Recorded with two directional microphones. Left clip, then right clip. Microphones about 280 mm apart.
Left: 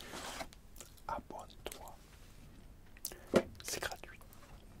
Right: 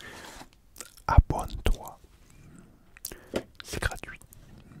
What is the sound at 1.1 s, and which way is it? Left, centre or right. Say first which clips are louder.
Whispering: right 14 dB; right.